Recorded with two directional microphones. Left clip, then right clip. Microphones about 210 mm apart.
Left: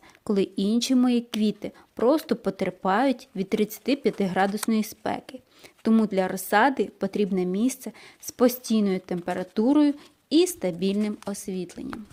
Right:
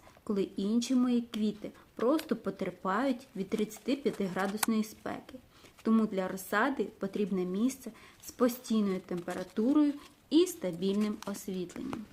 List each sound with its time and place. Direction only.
0.3 s speech: 35° left (ahead or behind)